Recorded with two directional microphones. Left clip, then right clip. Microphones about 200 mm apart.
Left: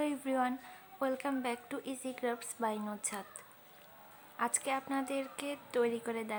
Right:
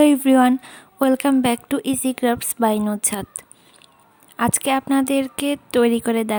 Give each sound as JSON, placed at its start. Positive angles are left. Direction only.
{"t": 0.0, "sound": "a woman's voice", "side_deg": -50}